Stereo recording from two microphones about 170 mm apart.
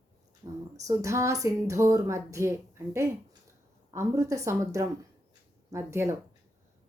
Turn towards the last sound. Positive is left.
turn(degrees=-15)  # may be behind; listen again after turning